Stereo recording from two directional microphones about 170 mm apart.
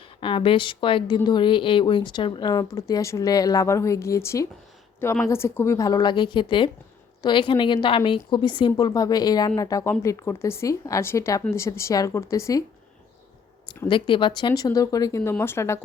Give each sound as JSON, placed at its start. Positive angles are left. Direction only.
{"t": 0.2, "sound": "a woman's voice", "side_deg": 30}
{"t": 13.8, "sound": "a woman's voice", "side_deg": 30}